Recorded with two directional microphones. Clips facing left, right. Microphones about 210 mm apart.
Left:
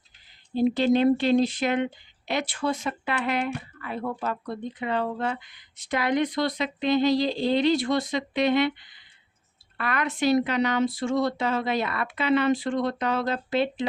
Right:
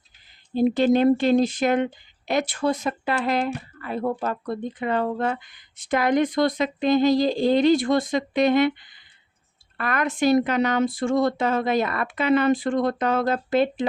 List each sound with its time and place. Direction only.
0.5 s speech: 50° right (ahead or behind)